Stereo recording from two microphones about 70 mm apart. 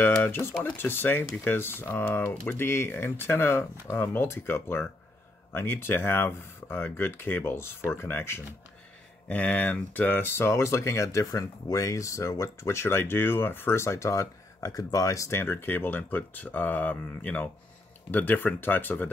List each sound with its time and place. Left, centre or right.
0.0 s speech: left
9.3 s speech: centre; by 15.3 s left
15.3 s speech: left